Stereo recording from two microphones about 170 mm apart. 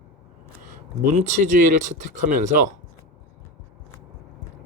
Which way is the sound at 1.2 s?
45° right (ahead or behind).